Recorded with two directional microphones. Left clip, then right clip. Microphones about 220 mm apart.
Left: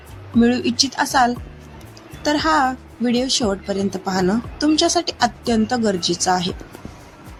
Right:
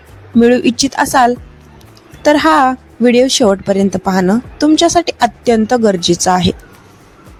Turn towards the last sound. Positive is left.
turn(degrees=-35)  # may be behind; listen again after turning